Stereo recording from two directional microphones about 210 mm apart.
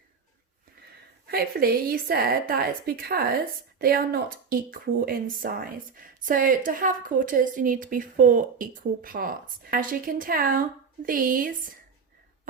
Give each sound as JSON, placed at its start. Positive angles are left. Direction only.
{"t": 1.3, "sound": "a woman's voice", "side_deg": -45}